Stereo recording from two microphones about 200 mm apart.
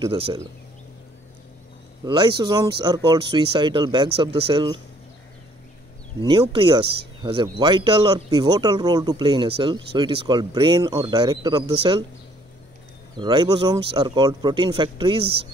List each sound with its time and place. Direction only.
0.0 s speech: 30° right (ahead or behind)
2.0 s speech: 20° right (ahead or behind)
6.2 s speech: 25° right (ahead or behind)
13.1 s speech: 25° right (ahead or behind)